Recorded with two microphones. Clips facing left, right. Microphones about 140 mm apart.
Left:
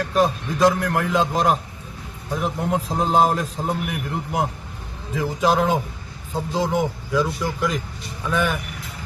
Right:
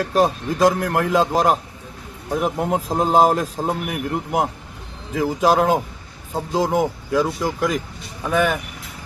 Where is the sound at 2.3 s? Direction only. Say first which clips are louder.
Right 3 dB; 55° right (ahead or behind).